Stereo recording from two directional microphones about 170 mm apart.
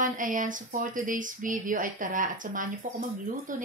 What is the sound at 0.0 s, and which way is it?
A woman's voice, 50° right (ahead or behind).